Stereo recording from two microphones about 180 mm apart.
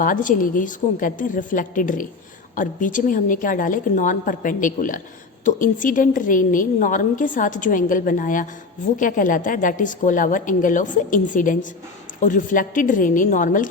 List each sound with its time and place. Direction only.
0.0 s a woman's voice: 50° left (ahead or behind)